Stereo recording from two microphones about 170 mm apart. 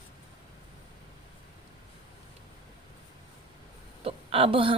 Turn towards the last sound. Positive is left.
turn(degrees=-30)  # may be behind; listen again after turning